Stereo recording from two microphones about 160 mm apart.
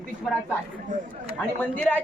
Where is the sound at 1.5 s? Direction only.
10° left (ahead or behind).